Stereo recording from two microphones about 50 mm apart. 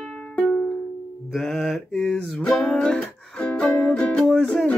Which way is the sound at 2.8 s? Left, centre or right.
Centre.